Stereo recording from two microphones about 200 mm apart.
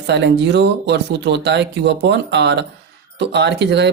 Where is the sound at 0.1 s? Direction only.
60° right (ahead or behind).